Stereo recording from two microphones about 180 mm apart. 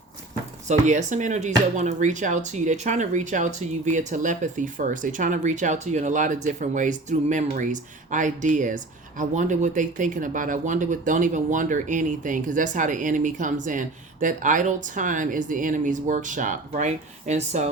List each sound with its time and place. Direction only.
0.7 s speech: 40° right (ahead or behind)